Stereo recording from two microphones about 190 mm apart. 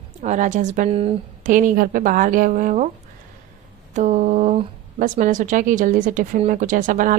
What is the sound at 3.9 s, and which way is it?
Speech, 40° right (ahead or behind).